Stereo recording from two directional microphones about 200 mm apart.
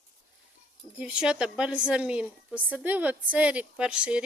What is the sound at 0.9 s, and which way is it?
A woman's voice, 5° right (ahead or behind).